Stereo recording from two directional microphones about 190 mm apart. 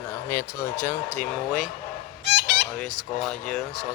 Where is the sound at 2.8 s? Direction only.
Centre (ahead or behind).